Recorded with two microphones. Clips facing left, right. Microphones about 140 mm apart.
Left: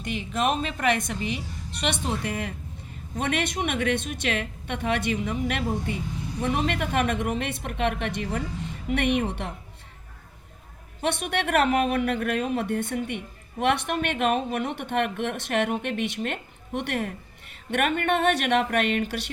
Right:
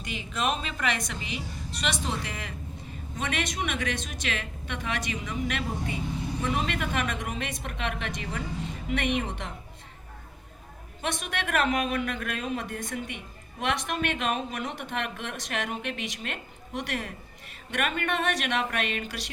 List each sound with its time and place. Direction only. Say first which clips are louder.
0.0 s a woman's voice: left 4 dB; 50° left (ahead or behind)
11.0 s speech: left 6 dB; 60° left (ahead or behind)